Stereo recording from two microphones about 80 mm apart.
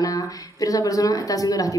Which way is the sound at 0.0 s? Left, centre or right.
Left.